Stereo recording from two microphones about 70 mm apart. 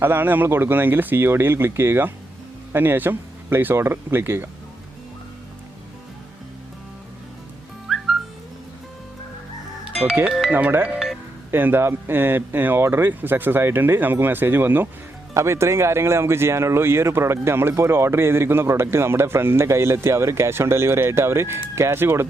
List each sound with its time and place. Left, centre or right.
0.0 s speech: right
7.9 s music: centre
10.0 s speech: centre
10.5 s speech: right
15.4 s speech: right